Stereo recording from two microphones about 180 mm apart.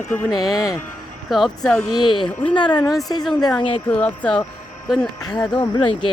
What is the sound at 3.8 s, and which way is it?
Speech, 10° left (ahead or behind).